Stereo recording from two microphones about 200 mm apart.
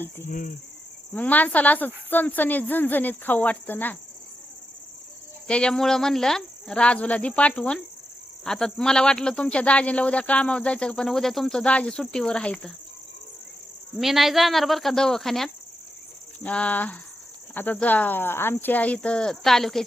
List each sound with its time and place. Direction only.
0.3 s cricket: 45° left (ahead or behind)
1.1 s speech: 10° left (ahead or behind)
5.5 s speech: 5° left (ahead or behind)
13.9 s speech: centre (ahead or behind)